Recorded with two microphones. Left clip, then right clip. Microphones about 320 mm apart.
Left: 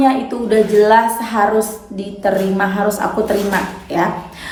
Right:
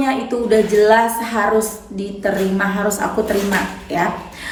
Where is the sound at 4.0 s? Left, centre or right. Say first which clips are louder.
Left 2 dB; centre.